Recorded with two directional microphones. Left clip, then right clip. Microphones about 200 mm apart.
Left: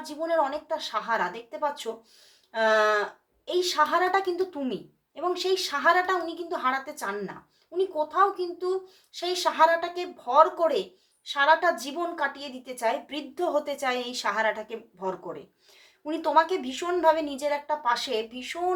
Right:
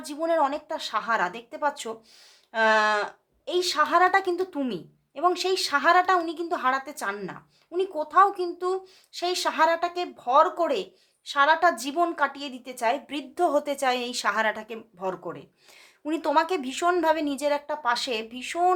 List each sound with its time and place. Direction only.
0.0 s speech: 40° right (ahead or behind)